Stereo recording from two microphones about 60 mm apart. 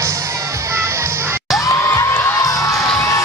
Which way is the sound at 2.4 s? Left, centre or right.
Left.